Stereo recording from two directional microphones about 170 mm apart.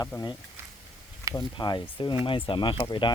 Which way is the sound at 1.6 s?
25° left (ahead or behind).